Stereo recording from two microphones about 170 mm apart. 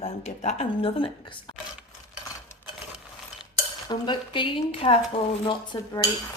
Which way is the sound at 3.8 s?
25° left (ahead or behind).